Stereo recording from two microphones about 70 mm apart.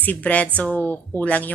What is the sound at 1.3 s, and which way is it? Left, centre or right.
Speech, left.